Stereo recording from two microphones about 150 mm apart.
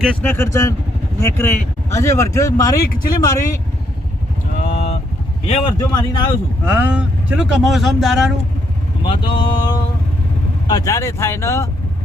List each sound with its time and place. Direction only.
0.0 s speech: 10° left (ahead or behind)
4.5 s vehicle: 55° left (ahead or behind)
5.8 s speech: 30° left (ahead or behind)
6.7 s speech: 10° right (ahead or behind)
9.0 s speech: 30° left (ahead or behind)